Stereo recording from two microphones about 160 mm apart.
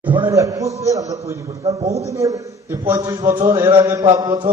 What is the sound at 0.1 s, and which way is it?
A man's voice, 25° right (ahead or behind).